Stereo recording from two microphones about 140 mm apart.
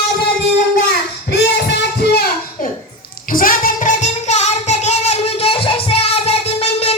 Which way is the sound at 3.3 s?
85° left.